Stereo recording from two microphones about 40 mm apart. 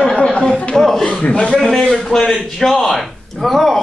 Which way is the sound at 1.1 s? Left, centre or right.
Left.